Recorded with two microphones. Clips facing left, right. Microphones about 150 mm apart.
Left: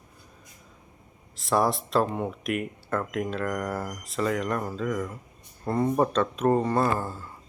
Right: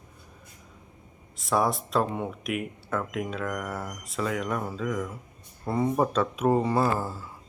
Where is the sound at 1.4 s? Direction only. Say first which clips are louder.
Left 1 dB; centre (ahead or behind).